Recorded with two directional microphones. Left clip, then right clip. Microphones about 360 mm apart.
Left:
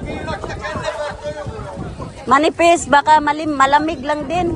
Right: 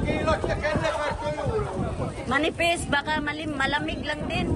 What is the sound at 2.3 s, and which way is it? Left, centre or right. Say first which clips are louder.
A woman's voice: left 12 dB; centre.